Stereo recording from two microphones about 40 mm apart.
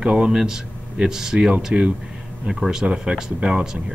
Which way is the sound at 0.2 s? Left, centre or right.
Centre.